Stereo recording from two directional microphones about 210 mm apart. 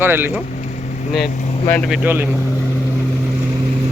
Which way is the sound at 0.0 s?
10° right (ahead or behind).